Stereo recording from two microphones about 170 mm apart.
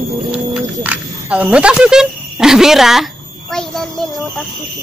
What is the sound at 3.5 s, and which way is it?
Child singing, 5° left (ahead or behind).